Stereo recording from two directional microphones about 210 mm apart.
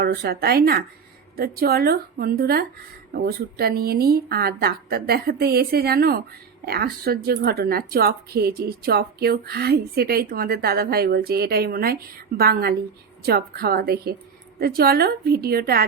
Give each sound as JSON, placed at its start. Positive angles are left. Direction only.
{"t": 0.0, "sound": "speech", "side_deg": -50}